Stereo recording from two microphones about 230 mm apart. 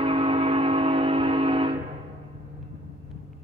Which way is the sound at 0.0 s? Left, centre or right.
Right.